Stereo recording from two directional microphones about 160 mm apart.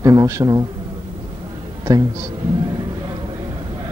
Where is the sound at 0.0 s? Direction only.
20° right (ahead or behind).